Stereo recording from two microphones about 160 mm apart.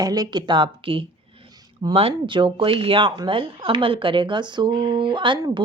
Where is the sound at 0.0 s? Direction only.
25° right (ahead or behind).